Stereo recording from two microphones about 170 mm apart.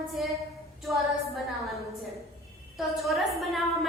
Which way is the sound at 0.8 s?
Centre (ahead or behind).